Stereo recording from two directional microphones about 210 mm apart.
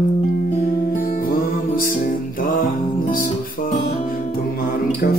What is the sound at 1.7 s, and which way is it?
Music, 40° left (ahead or behind).